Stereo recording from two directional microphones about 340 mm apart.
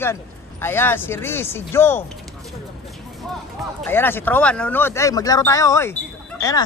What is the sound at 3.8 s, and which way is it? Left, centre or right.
Speech, centre.